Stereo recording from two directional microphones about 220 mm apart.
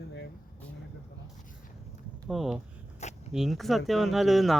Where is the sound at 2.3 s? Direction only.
Centre (ahead or behind).